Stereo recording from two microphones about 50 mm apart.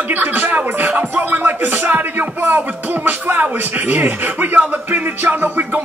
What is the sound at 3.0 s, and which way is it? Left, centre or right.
Speech, right.